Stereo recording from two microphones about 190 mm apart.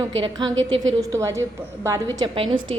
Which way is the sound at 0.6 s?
90° right.